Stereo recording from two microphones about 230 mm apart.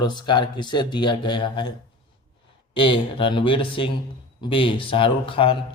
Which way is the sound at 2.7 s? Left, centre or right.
Left.